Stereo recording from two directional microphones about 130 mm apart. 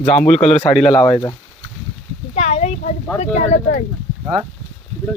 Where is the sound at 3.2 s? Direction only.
65° left (ahead or behind).